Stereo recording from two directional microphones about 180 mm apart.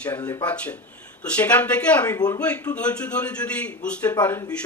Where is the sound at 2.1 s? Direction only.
20° left (ahead or behind).